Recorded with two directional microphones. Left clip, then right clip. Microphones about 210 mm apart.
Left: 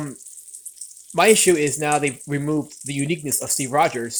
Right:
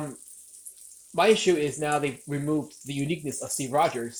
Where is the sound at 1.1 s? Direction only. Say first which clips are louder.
Left 6 dB; 30° left (ahead or behind).